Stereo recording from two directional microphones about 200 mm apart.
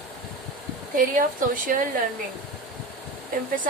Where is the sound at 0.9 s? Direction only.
45° right (ahead or behind).